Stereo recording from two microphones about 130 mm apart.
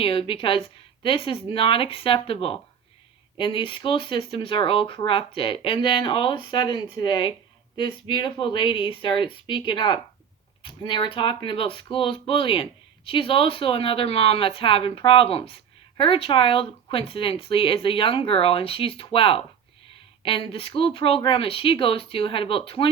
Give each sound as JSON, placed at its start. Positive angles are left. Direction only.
{"t": 0.0, "sound": "speech", "side_deg": 45}